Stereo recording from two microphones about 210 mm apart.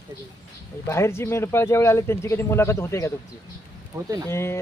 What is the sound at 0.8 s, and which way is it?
Speech, 15° left (ahead or behind).